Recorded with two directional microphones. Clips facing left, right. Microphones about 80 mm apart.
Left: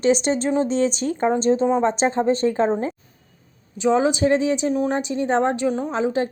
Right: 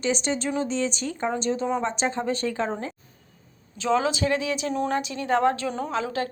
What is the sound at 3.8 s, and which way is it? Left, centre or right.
Speech, left.